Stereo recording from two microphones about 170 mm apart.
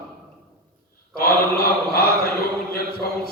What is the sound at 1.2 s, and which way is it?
Mantra, 65° left (ahead or behind).